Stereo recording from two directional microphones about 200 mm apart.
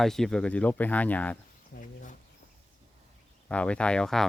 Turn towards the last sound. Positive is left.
turn(degrees=5)  # may be behind; listen again after turning